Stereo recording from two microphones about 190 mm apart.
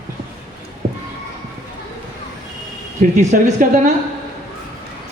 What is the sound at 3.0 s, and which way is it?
Speech, 40° right (ahead or behind).